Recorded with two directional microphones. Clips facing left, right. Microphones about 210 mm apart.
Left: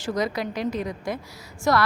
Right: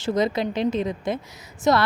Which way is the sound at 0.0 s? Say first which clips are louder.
Right 4 dB; 25° right (ahead or behind).